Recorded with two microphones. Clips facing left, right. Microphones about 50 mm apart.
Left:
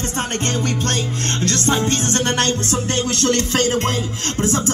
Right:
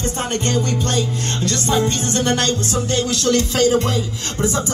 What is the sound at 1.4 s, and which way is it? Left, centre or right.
Music, left.